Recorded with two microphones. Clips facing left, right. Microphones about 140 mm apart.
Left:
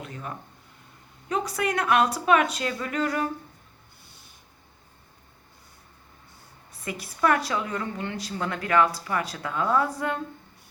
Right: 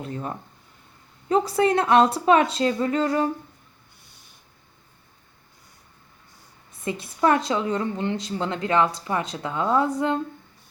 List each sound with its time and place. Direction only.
0.0 s a woman's voice: 30° right (ahead or behind)
6.8 s a woman's voice: 25° right (ahead or behind)